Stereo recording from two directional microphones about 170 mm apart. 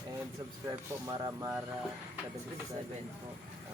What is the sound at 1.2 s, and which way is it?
Speech, 20° right (ahead or behind).